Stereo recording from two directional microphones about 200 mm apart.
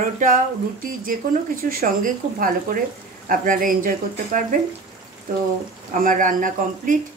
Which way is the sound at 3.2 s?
45° right (ahead or behind).